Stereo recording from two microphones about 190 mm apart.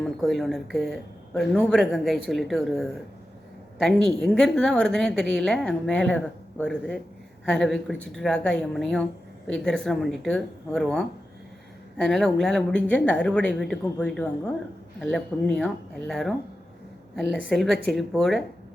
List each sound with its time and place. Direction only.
0.0 s a woman's voice: centre (ahead or behind)